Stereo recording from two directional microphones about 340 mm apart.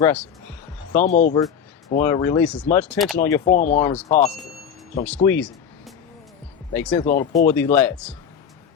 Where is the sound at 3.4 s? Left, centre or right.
Left.